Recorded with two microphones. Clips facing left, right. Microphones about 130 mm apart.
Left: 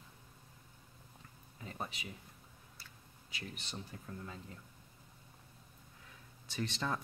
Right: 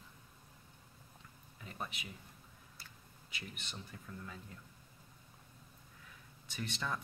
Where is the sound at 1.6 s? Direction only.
30° left (ahead or behind).